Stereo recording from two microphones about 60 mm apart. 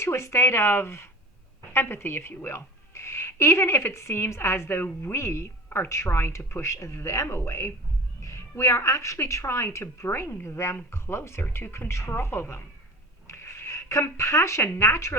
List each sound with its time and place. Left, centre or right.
0.0 s a woman's voice: left